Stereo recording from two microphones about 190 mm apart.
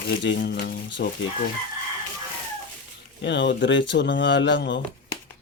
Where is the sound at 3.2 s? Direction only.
65° left (ahead or behind).